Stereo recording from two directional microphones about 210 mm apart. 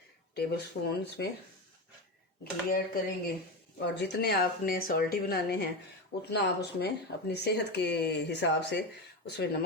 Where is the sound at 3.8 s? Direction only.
55° left (ahead or behind).